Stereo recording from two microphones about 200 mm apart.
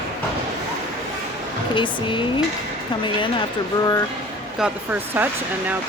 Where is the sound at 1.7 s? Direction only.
25° left (ahead or behind).